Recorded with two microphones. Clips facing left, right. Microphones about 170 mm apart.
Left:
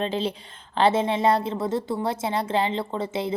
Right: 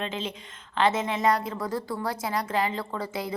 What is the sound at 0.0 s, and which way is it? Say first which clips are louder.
A woman's voice: left 6 dB; 35° left (ahead or behind).